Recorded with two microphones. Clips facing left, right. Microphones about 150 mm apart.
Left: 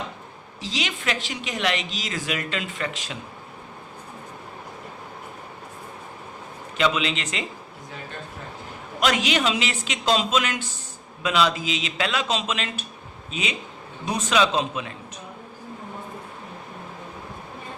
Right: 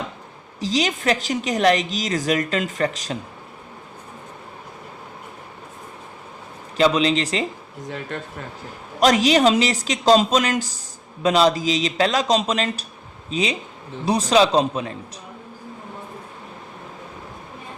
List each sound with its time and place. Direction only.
0.6 s a woman's voice: 40° right (ahead or behind)
6.7 s a woman's voice: 35° right (ahead or behind)
8.1 s speech: 80° right
9.0 s a woman's voice: 35° right (ahead or behind)